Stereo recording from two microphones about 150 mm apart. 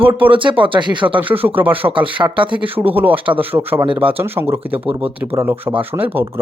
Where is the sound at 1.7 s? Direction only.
35° right (ahead or behind).